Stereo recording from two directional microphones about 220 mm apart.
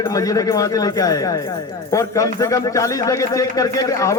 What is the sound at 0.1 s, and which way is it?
A man's voice, 15° left (ahead or behind).